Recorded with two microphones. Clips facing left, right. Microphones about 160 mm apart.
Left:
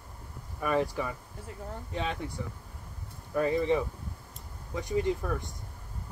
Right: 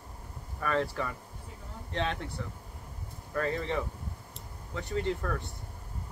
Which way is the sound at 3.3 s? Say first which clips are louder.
Left 5 dB; 15° left (ahead or behind).